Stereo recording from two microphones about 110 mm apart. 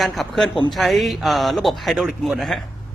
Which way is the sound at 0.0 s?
Centre (ahead or behind).